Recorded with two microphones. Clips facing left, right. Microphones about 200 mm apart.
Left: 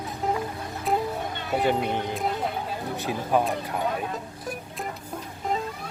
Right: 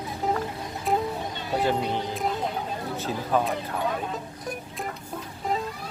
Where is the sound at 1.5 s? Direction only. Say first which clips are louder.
Left 1 dB; 10° left (ahead or behind).